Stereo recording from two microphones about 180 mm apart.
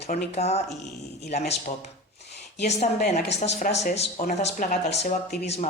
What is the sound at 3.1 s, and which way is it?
Speech, 35° left (ahead or behind).